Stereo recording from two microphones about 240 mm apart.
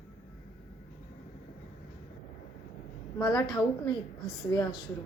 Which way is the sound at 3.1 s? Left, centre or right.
Centre.